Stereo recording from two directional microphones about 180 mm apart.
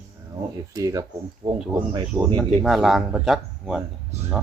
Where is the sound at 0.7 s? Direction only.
20° right (ahead or behind).